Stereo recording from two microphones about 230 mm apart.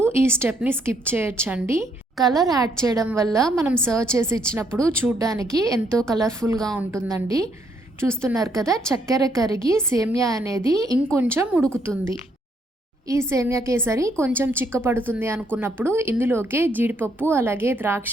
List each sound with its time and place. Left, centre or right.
0.0 s a woman's voice: centre
5.9 s a woman's voice: centre
6.9 s a woman's voice: centre
11.6 s a woman's voice: centre
13.1 s a woman's voice: centre